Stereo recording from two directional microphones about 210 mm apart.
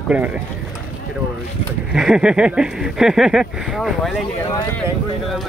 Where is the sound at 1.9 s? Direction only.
5° right (ahead or behind).